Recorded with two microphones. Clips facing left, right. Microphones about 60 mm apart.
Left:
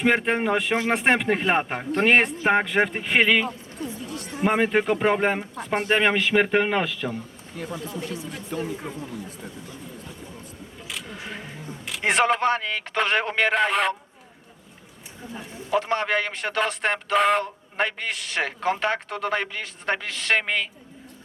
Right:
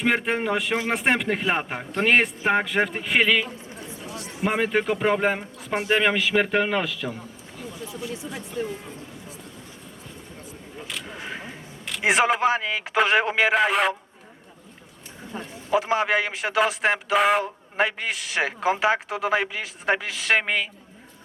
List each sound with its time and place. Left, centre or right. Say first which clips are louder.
0.0 s speech: left 2 dB; centre
3.8 s a sound: left 5 dB; right
4.4 s speech: left 2 dB; centre
7.5 s speech: left 5 dB; left
10.8 s a sound: right 1 dB; centre
11.9 s speech: right 1 dB; centre
15.7 s speech: right 2 dB; centre